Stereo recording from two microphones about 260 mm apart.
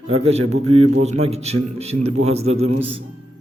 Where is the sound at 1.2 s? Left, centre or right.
Right.